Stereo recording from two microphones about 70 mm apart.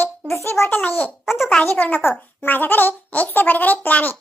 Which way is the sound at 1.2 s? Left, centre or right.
Centre.